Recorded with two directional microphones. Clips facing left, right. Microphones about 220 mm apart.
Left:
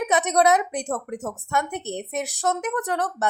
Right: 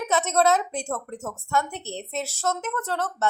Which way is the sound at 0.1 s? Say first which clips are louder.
Left 1 dB; 15° left (ahead or behind).